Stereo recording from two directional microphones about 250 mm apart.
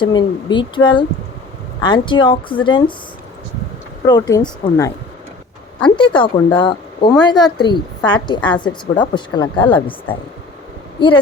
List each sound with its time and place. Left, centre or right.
0.0 s a woman's voice: centre
4.0 s a woman's voice: centre